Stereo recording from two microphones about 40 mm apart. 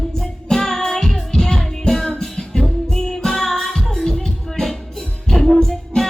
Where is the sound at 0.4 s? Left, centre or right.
Centre.